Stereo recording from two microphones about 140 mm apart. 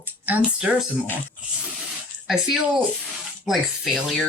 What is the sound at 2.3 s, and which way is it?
Speech, 5° right (ahead or behind).